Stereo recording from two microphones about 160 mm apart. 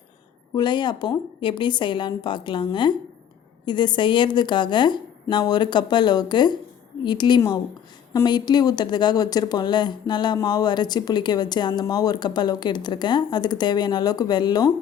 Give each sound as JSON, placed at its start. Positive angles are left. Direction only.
{"t": 0.5, "sound": "a woman's voice", "side_deg": 30}